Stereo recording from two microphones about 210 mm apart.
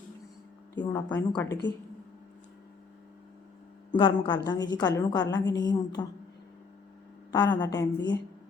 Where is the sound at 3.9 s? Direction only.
20° left (ahead or behind).